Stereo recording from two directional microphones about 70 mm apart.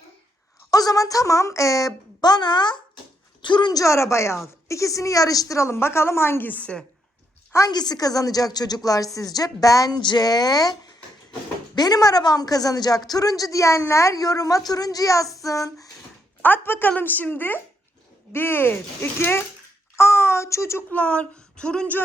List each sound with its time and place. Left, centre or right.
0.7 s speech: left
2.2 s a child's voice: left
3.9 s speech: left
5.5 s a woman's voice: left
6.5 s speech: centre
7.7 s speech: left
16.4 s a woman's voice: left
20.9 s speech: centre